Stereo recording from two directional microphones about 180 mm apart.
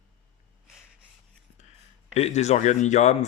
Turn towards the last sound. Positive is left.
turn(degrees=40)  # may be behind; listen again after turning